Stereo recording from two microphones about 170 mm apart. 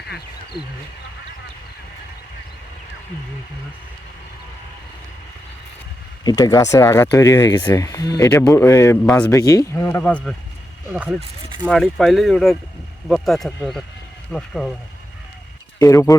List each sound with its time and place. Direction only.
6.2 s speech: 20° left (ahead or behind)
10.0 s speech: 5° left (ahead or behind)
10.9 s speech: 5° right (ahead or behind)
15.8 s speech: 20° left (ahead or behind)